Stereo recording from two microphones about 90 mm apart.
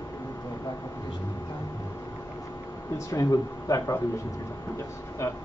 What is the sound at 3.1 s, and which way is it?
Speech, 40° left (ahead or behind).